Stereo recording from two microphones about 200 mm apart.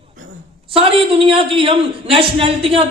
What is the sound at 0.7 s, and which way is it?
A man's voice, 30° right (ahead or behind).